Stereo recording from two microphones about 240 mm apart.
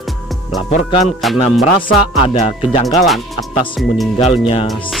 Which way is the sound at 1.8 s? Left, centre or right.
Left.